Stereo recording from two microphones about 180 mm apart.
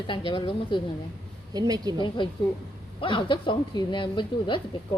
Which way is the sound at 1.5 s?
20° right (ahead or behind).